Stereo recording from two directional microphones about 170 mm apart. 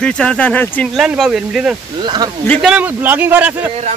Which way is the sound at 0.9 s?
5° right (ahead or behind).